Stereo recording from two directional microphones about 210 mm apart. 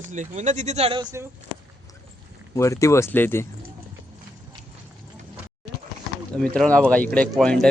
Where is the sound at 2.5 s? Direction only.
15° left (ahead or behind).